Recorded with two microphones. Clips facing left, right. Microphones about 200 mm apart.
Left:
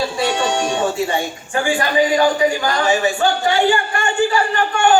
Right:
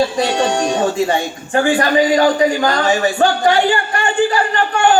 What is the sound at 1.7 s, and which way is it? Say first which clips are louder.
Speech: right 1 dB; 40° right (ahead or behind).